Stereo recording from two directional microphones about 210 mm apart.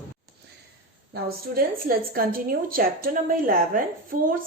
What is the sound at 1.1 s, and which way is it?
A woman's voice, 45° right (ahead or behind).